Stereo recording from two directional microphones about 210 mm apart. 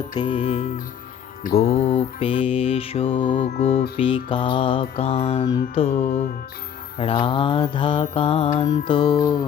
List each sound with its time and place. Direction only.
0.1 s mantra: 20° left (ahead or behind)
3.3 s music: 30° left (ahead or behind)
3.9 s mantra: 25° left (ahead or behind)
5.9 s music: 35° left (ahead or behind)
7.0 s mantra: 25° left (ahead or behind)